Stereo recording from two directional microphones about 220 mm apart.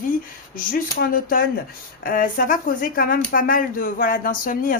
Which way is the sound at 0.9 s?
40° left (ahead or behind).